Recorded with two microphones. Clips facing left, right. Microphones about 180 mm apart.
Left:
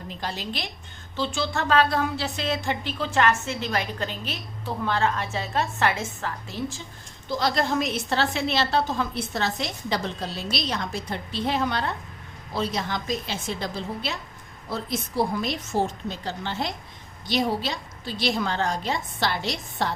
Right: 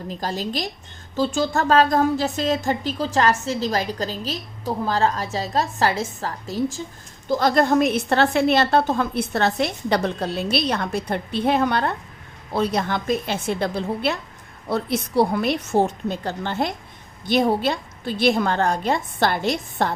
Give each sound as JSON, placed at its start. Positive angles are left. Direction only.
{"t": 0.1, "sound": "a woman's voice", "side_deg": -40}